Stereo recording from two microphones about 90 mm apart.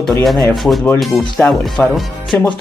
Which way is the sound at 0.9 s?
Centre (ahead or behind).